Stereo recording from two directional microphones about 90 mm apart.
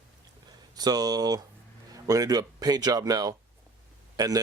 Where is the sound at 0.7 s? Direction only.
45° right (ahead or behind).